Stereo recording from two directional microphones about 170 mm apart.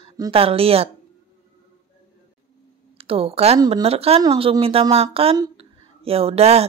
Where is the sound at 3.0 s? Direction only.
35° right (ahead or behind).